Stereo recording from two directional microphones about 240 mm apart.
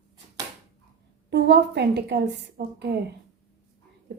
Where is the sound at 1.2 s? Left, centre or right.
Right.